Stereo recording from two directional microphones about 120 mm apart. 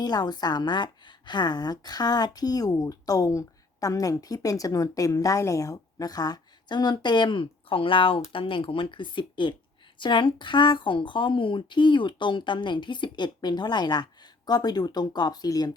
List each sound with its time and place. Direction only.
0.0 s a woman's voice: 35° left (ahead or behind)